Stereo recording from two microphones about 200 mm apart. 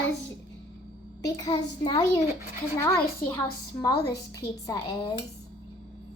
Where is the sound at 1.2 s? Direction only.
20° left (ahead or behind).